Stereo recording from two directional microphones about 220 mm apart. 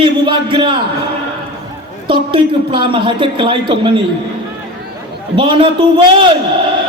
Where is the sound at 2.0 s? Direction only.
25° right (ahead or behind).